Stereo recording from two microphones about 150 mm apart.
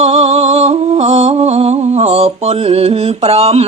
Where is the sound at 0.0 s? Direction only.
45° right (ahead or behind).